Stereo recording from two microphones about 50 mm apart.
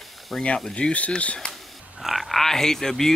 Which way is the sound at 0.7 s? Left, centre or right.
Left.